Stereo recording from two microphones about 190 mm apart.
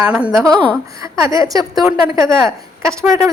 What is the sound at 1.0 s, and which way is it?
Speech, 15° right (ahead or behind).